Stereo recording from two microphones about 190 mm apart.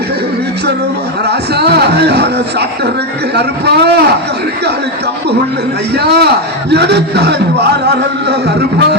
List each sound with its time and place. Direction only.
1.3 s a man's voice: 60° right (ahead or behind)
5.9 s a man's voice: 60° right (ahead or behind)